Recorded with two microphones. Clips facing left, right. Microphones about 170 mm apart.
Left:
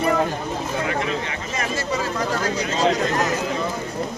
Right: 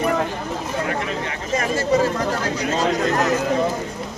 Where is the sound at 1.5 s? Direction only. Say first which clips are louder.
Right 7 dB; 45° right (ahead or behind).